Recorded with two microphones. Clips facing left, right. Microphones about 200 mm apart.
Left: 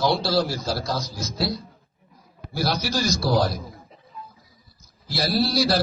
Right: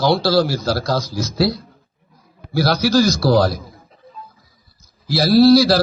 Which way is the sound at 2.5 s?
75° right (ahead or behind).